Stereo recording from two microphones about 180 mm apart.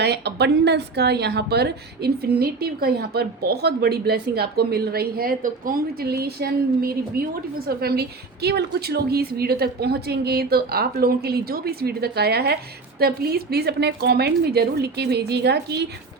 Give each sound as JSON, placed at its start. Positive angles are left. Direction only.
{"t": 0.0, "sound": "a woman's voice", "side_deg": -65}